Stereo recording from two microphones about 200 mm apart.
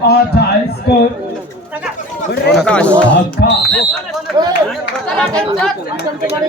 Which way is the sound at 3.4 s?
55° left (ahead or behind).